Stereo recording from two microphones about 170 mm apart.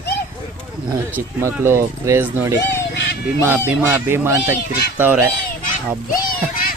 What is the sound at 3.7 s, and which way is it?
Speech, 15° right (ahead or behind).